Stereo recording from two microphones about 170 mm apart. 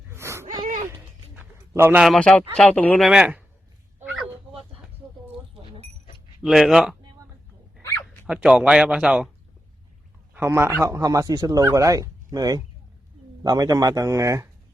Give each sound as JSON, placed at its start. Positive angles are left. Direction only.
{"t": 0.1, "sound": "gasp", "side_deg": -15}
{"t": 0.6, "sound": "dog", "side_deg": -50}
{"t": 1.4, "sound": "a sound", "side_deg": -10}
{"t": 2.0, "sound": "speech", "side_deg": 5}
{"t": 4.1, "sound": "a sound", "side_deg": 0}
{"t": 6.4, "sound": "speech", "side_deg": 0}
{"t": 7.8, "sound": "dog", "side_deg": 15}
{"t": 8.3, "sound": "speech", "side_deg": -5}
{"t": 10.3, "sound": "speech", "side_deg": -15}